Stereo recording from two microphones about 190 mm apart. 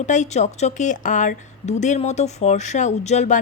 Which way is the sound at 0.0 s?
40° left (ahead or behind).